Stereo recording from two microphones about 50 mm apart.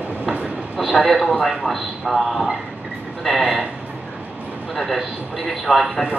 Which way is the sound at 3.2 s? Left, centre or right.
Centre.